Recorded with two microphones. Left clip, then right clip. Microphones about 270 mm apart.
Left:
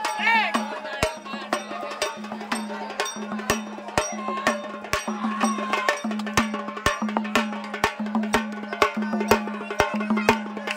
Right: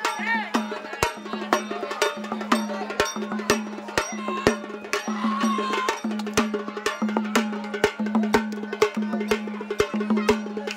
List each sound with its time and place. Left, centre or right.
0.2 s music: left
1.0 s music: centre